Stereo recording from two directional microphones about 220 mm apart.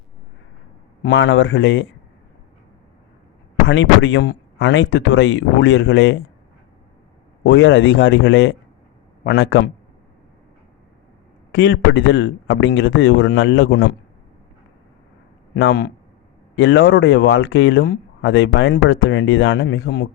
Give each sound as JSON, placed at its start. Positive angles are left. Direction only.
{"t": 1.0, "sound": "speech", "side_deg": 55}
{"t": 3.7, "sound": "speech", "side_deg": 55}
{"t": 7.4, "sound": "speech", "side_deg": 55}
{"t": 11.5, "sound": "speech", "side_deg": 50}
{"t": 15.5, "sound": "speech", "side_deg": 50}